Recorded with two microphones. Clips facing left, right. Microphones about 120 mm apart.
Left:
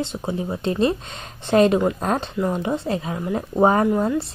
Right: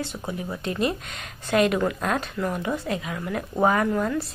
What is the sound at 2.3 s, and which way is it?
A woman's voice, 20° left (ahead or behind).